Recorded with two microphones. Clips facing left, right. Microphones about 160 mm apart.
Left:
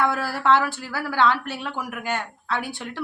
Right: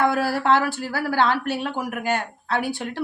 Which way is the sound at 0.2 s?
35° right (ahead or behind).